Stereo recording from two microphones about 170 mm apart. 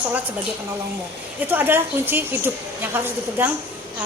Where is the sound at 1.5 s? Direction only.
10° right (ahead or behind).